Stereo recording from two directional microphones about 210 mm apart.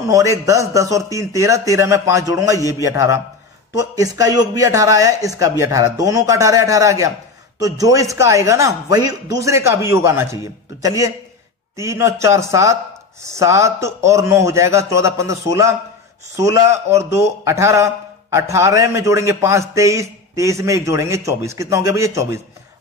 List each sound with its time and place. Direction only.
0.0 s a man's voice: 15° right (ahead or behind)